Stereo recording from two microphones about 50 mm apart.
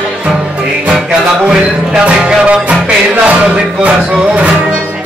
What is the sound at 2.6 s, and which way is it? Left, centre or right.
Music, right.